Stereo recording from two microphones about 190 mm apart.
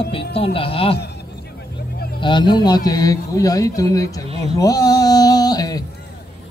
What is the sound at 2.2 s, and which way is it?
A man's voice, 25° left (ahead or behind).